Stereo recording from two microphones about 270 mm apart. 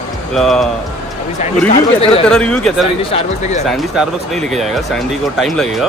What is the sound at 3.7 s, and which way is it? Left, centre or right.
Speech, centre.